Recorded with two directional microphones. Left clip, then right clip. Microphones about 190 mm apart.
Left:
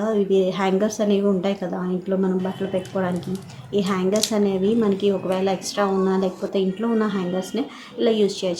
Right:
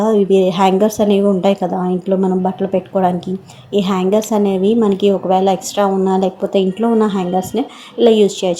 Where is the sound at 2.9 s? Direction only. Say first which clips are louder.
Right 10 dB; 20° right (ahead or behind).